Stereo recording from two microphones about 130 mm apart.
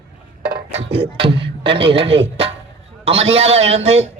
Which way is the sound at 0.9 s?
45° right (ahead or behind).